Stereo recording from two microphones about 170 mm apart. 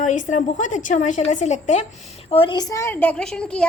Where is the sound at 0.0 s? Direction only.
45° left (ahead or behind).